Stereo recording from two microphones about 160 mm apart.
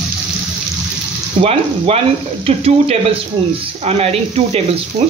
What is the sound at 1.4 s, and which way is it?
Speech, 40° right (ahead or behind).